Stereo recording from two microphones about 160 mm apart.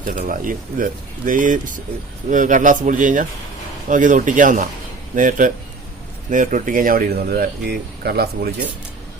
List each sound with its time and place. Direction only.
0.0 s speech: 55° right (ahead or behind); by 8.4 s 80° right